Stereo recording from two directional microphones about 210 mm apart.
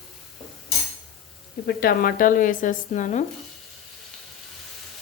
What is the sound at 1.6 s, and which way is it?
Speech, 45° left (ahead or behind).